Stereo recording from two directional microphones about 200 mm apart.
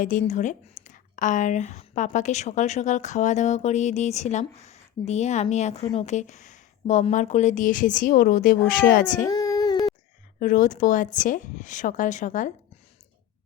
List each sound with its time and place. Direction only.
0.0 s speech: 40° left (ahead or behind)
9.2 s child singing: 15° left (ahead or behind)
10.4 s speech: 40° left (ahead or behind)